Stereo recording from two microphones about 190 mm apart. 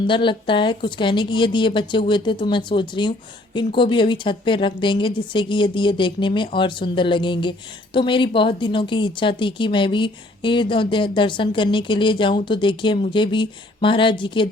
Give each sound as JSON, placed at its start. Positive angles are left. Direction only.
{"t": 0.1, "sound": "a woman's voice", "side_deg": 25}